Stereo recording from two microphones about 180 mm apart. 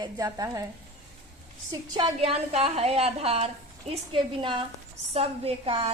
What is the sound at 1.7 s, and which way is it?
A woman's voice, 25° right (ahead or behind).